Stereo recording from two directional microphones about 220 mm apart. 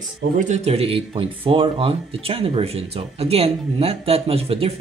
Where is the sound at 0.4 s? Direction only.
30° right (ahead or behind).